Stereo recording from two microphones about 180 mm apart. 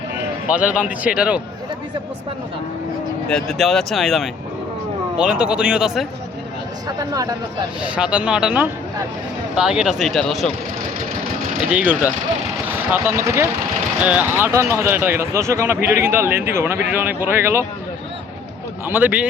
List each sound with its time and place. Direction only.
0.5 s speech: 5° right (ahead or behind)
3.2 s speech: centre (ahead or behind)
6.8 s speech: 20° right (ahead or behind)
7.9 s speech: 5° right (ahead or behind)
11.7 s speech: 10° right (ahead or behind)
18.9 s speech: 10° right (ahead or behind)